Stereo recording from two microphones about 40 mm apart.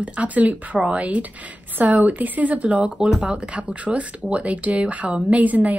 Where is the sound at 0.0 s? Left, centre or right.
Right.